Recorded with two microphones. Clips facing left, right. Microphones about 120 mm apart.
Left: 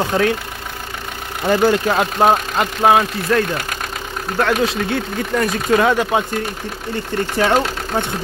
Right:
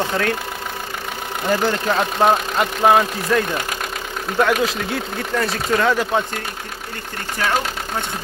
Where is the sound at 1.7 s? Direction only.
10° left (ahead or behind).